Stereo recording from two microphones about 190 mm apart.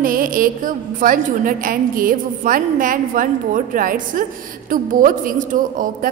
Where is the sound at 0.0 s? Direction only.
45° right (ahead or behind).